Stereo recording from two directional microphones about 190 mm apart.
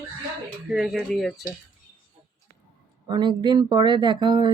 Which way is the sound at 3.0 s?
20° right (ahead or behind).